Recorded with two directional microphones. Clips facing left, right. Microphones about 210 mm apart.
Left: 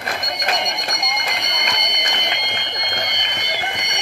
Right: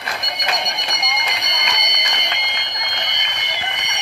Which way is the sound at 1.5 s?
50° left (ahead or behind).